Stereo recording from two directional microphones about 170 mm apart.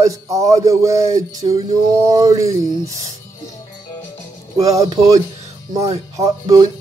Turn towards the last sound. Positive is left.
turn(degrees=-20)  # may be behind; listen again after turning